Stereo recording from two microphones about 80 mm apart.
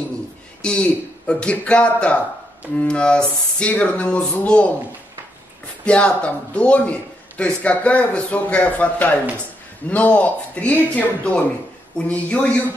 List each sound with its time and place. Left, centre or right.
0.6 s a man's voice: centre
5.9 s a man's voice: centre